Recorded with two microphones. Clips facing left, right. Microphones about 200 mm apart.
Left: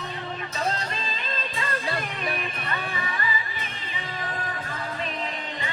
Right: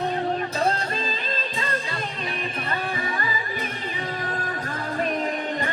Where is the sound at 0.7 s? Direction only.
50° right (ahead or behind).